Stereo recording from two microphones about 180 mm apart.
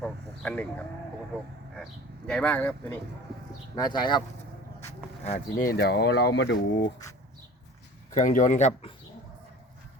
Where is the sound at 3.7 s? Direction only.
25° left (ahead or behind).